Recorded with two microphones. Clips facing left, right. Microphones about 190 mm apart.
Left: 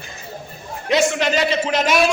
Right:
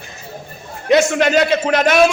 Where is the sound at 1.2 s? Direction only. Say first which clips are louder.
Right 5 dB; 55° right (ahead or behind).